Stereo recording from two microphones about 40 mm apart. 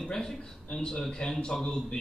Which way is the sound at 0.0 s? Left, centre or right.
Centre.